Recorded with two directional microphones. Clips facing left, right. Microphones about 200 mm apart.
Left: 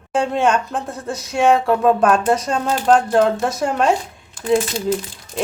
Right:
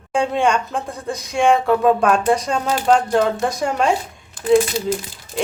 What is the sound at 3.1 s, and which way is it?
Speech, centre (ahead or behind).